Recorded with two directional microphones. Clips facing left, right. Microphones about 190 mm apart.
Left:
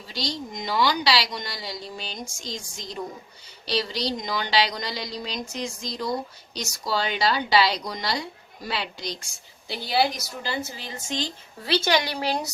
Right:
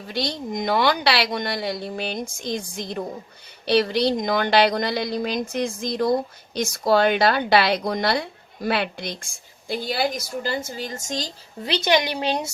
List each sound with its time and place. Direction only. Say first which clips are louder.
0.1 s a woman's voice: right 5 dB; 55° right (ahead or behind)
11.6 s a woman's voice: right 2 dB; 20° right (ahead or behind)